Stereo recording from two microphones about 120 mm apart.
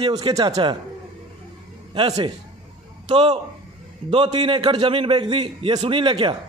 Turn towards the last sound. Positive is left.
turn(degrees=-45)  # may be behind; listen again after turning